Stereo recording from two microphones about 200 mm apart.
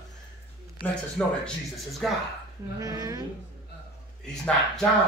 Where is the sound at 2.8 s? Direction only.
15° right (ahead or behind).